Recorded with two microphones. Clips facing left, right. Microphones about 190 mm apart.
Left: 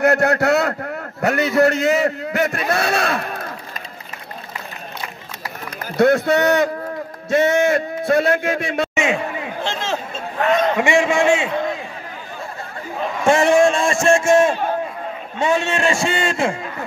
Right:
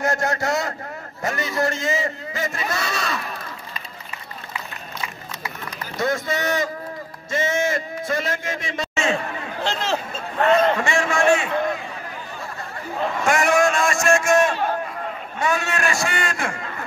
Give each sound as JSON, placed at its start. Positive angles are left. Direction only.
{"t": 0.0, "sound": "a man's voice", "side_deg": 65}
{"t": 5.9, "sound": "a man's voice", "side_deg": 65}
{"t": 8.9, "sound": "a sound", "side_deg": 15}
{"t": 10.6, "sound": "a man's voice", "side_deg": 15}
{"t": 13.2, "sound": "a sound", "side_deg": 25}
{"t": 15.3, "sound": "a man's voice", "side_deg": 25}